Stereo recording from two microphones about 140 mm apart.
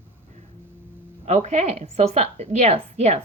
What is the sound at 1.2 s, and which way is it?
A woman's voice, 50° right (ahead or behind).